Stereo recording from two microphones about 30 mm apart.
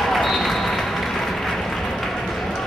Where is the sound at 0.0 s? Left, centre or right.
Centre.